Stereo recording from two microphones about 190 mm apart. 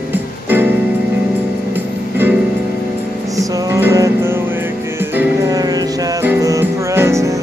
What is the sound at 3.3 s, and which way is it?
Music, 15° right (ahead or behind).